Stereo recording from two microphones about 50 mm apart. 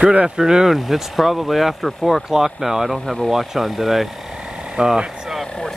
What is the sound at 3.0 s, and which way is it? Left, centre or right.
Speech, centre.